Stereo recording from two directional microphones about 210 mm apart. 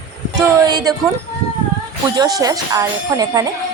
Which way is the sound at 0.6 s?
20° right (ahead or behind).